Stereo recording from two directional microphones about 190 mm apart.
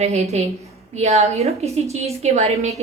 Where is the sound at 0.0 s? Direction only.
35° right (ahead or behind).